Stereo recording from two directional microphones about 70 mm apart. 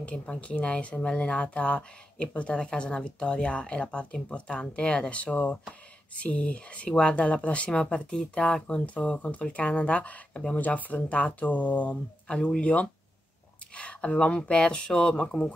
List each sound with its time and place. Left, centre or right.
0.0 s speech: centre